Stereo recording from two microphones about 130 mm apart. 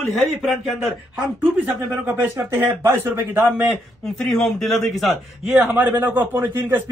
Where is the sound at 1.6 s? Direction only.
15° right (ahead or behind).